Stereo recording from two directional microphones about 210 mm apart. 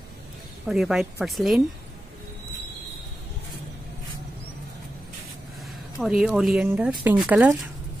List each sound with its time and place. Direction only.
0.7 s speech: centre (ahead or behind)
5.9 s speech: 5° right (ahead or behind)